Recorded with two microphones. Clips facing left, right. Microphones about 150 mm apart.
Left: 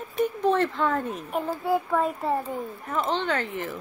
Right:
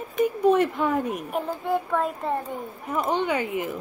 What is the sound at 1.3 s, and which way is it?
A child's voice, 5° left (ahead or behind).